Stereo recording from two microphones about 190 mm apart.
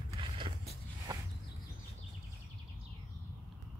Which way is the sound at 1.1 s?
20° right (ahead or behind).